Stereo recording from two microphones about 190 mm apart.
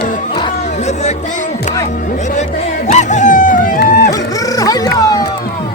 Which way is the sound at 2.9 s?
40° left (ahead or behind).